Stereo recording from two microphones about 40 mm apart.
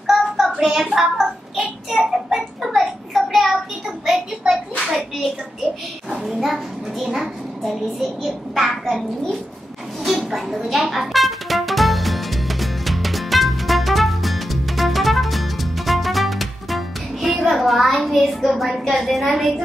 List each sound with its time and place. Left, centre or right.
0.0 s child singing: centre
0.9 s a child's voice: centre
2.0 s a sound: centre
2.3 s child singing: centre
6.4 s a child's voice: centre
10.3 s music: centre
18.9 s a child's voice: centre